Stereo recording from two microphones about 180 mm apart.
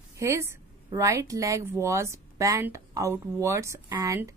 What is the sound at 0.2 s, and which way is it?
A woman's voice, 15° right (ahead or behind).